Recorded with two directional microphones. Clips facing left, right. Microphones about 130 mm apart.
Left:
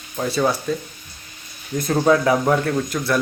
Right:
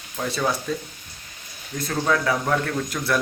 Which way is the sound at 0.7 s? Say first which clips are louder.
Left 4 dB; centre (ahead or behind).